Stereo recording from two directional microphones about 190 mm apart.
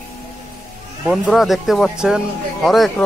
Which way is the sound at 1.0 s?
Centre (ahead or behind).